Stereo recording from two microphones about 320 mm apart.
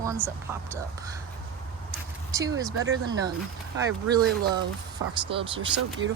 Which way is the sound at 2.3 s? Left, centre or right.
Centre.